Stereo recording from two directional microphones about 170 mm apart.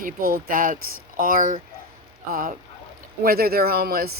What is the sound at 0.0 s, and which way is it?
Speech, 55° right (ahead or behind).